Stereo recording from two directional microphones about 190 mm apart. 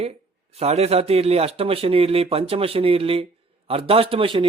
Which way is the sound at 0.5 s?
35° right (ahead or behind).